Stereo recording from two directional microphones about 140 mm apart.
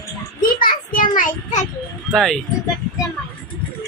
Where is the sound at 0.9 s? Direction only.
70° left (ahead or behind).